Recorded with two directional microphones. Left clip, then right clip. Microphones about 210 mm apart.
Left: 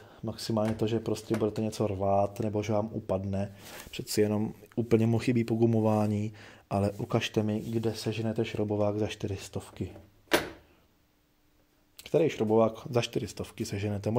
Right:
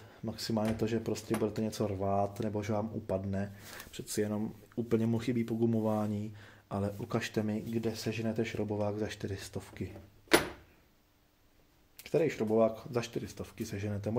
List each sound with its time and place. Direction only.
0.2 s speech: 20° left (ahead or behind)
12.0 s speech: 30° left (ahead or behind)